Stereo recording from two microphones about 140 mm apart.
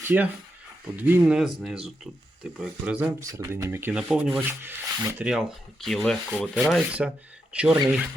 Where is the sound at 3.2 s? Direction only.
20° right (ahead or behind).